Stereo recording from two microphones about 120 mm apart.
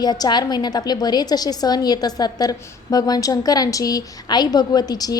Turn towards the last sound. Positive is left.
turn(degrees=35)  # may be behind; listen again after turning